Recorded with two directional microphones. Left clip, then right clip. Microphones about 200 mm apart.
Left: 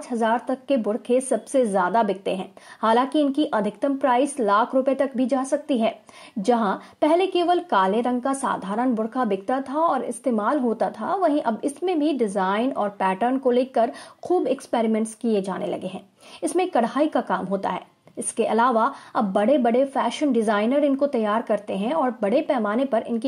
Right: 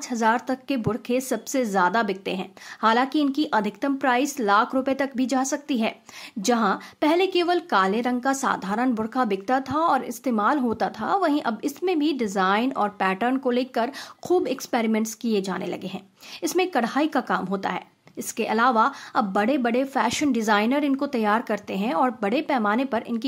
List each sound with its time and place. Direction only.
0.1 s a woman's voice: 5° right (ahead or behind)